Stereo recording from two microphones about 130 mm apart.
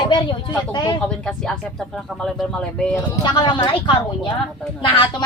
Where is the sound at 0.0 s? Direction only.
40° left (ahead or behind).